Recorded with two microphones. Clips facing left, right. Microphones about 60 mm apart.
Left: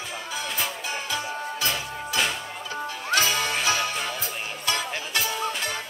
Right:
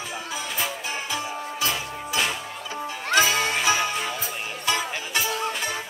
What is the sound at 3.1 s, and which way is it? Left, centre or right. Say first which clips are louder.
Music: right 3 dB; centre.